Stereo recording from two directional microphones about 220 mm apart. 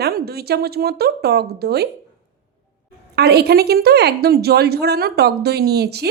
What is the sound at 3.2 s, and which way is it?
A woman's voice, 45° right (ahead or behind).